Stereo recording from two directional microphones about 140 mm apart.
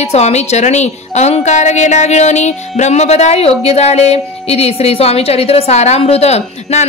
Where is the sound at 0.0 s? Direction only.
50° left (ahead or behind).